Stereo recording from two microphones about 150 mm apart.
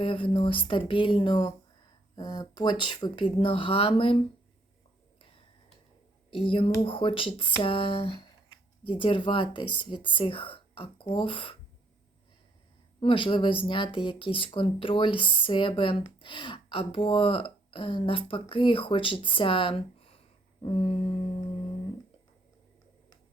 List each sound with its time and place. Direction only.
0.0 s speech: 35° left (ahead or behind)
6.3 s speech: 35° left (ahead or behind)
13.0 s speech: 35° left (ahead or behind)